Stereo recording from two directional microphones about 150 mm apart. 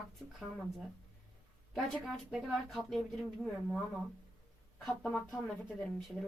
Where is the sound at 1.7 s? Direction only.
Centre (ahead or behind).